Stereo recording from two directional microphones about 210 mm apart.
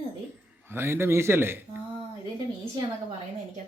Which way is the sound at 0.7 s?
10° right (ahead or behind).